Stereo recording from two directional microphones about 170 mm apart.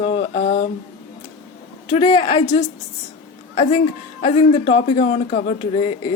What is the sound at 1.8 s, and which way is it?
Speech, 30° left (ahead or behind).